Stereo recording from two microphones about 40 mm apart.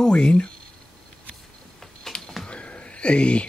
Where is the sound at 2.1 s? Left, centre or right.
Centre.